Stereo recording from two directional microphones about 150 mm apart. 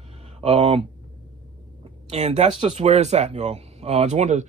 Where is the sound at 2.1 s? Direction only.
50° right (ahead or behind).